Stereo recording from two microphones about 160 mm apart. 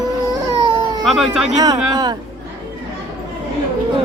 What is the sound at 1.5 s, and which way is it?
Speech, 25° right (ahead or behind).